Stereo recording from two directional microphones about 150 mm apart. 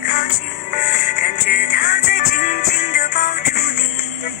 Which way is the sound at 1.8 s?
75° left (ahead or behind).